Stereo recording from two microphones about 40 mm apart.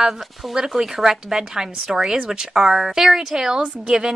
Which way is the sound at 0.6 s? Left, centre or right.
Centre.